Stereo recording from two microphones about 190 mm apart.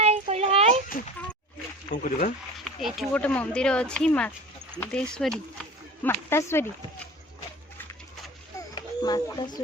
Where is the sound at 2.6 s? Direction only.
Centre (ahead or behind).